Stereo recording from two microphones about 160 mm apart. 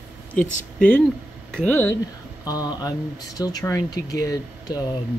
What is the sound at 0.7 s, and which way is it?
Speech, 10° left (ahead or behind).